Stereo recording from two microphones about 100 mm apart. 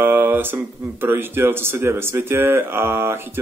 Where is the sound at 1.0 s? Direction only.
20° right (ahead or behind).